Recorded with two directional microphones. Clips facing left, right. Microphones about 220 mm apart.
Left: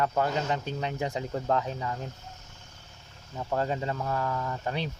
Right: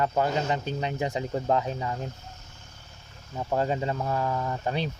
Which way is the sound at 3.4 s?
25° right (ahead or behind).